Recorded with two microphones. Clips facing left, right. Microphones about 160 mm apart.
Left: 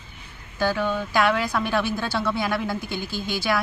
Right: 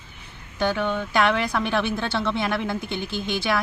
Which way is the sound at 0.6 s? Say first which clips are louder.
Even; 5° left (ahead or behind).